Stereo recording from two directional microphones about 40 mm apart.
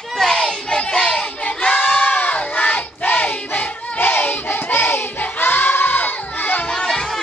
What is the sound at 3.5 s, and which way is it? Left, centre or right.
Child singing, left.